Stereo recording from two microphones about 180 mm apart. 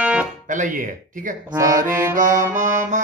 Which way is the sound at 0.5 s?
45° right (ahead or behind).